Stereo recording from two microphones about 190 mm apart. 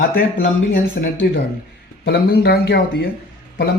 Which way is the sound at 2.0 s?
55° left (ahead or behind).